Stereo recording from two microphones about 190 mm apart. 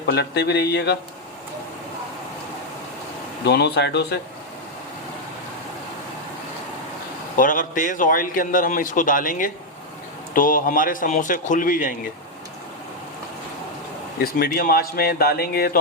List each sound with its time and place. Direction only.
0.0 s speech: 60° left (ahead or behind)
3.4 s speech: 60° left (ahead or behind)
7.3 s a man's voice: 45° left (ahead or behind)
14.2 s a man's voice: 55° left (ahead or behind)